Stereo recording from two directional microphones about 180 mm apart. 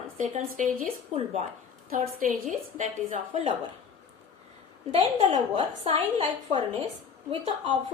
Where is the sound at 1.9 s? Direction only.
50° right (ahead or behind).